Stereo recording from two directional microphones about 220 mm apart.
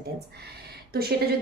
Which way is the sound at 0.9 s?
45° right (ahead or behind).